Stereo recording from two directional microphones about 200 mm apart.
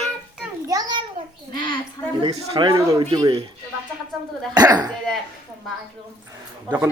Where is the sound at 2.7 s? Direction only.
15° right (ahead or behind).